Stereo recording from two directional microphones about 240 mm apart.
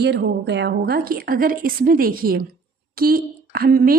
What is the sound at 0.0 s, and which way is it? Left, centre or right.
A woman's voice, right.